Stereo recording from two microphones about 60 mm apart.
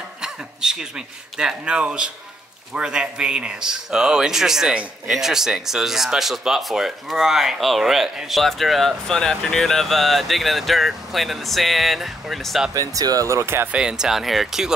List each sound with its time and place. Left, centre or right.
0.2 s speech: centre
12.7 s speech: right
13.3 s speech: right
13.7 s speech: centre